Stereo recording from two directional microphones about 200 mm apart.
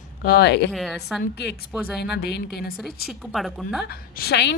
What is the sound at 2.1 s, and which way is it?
Speech, 55° left (ahead or behind).